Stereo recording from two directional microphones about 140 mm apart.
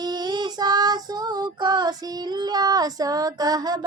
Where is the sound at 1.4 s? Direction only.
30° right (ahead or behind).